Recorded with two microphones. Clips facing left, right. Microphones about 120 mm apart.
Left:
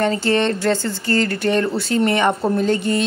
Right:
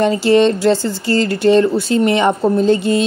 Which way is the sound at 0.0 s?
15° right (ahead or behind).